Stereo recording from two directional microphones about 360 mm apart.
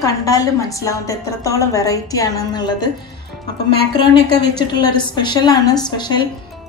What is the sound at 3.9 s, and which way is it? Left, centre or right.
Speech, centre.